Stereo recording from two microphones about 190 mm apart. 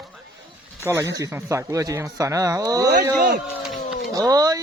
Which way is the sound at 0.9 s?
15° right (ahead or behind).